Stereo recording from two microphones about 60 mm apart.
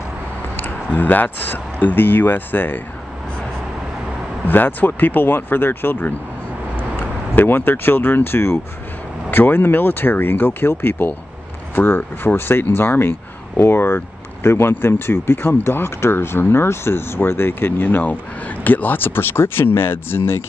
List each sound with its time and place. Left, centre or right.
0.6 s speech: left
4.5 s speech: left